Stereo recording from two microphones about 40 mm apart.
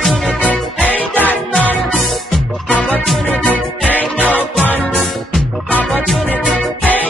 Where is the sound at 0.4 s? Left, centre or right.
Left.